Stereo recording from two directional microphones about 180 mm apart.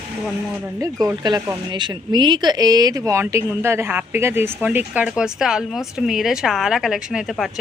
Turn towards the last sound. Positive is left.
turn(degrees=0)  # may be behind; listen again after turning